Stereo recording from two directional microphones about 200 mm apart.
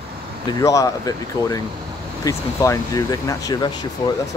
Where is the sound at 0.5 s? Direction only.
15° left (ahead or behind).